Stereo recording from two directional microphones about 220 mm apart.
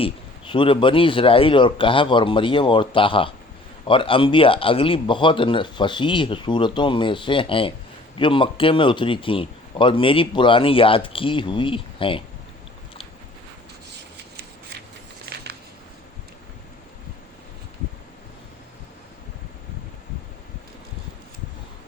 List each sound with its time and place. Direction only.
0.0 s speech: 20° left (ahead or behind)